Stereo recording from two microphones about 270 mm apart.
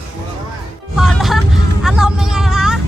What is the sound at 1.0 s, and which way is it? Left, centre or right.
Speech, centre.